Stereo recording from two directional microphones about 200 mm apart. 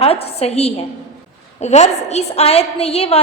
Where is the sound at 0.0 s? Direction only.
30° left (ahead or behind).